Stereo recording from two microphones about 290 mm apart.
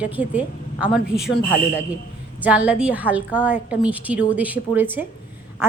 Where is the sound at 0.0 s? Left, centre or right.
Centre.